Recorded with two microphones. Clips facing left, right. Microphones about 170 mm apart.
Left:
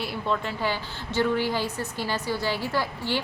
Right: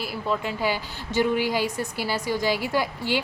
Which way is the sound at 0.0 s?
5° right (ahead or behind).